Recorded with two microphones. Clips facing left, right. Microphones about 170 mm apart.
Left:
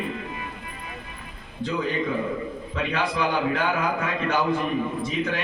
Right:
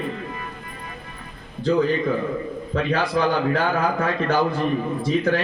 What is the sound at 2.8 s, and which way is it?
A man's voice, 35° right (ahead or behind).